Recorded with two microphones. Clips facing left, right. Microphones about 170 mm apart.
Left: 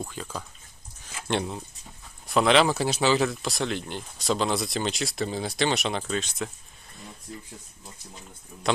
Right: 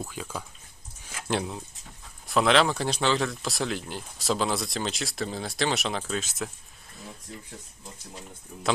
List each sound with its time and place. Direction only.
0.0 s speech: 5° right (ahead or behind)
1.0 s a sound: centre (ahead or behind)
2.2 s speech: centre (ahead or behind)